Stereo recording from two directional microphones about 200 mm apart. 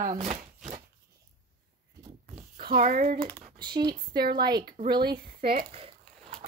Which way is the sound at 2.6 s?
45° right (ahead or behind).